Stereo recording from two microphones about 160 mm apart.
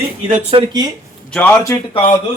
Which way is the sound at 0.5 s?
25° right (ahead or behind).